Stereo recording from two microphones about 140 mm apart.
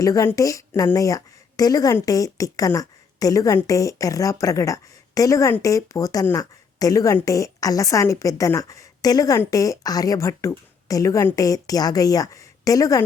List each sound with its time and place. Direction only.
0.0 s a woman's voice: 25° left (ahead or behind)